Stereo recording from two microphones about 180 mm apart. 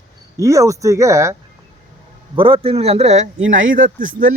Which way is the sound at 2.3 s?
30° right (ahead or behind).